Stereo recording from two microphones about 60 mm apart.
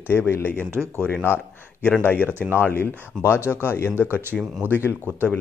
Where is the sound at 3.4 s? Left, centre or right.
Left.